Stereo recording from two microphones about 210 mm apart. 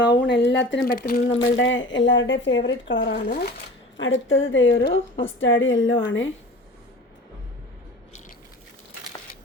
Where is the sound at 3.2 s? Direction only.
45° left (ahead or behind).